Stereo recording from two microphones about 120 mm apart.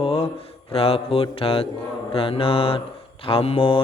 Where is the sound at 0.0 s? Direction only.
55° left (ahead or behind).